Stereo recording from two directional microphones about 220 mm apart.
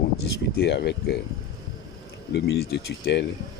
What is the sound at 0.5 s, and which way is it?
Speech, 50° left (ahead or behind).